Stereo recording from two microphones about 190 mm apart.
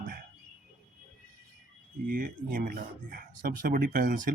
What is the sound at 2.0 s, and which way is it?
Speech, 45° right (ahead or behind).